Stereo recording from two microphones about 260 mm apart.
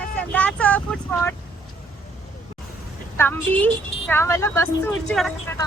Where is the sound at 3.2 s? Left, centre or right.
Centre.